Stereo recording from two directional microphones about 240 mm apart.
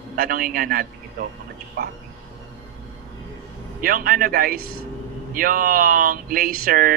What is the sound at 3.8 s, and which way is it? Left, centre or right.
A man's voice, right.